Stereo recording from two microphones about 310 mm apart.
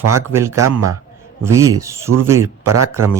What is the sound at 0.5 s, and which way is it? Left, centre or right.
Speech, right.